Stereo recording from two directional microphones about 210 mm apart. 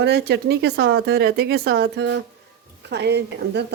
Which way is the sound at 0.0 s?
50° right (ahead or behind).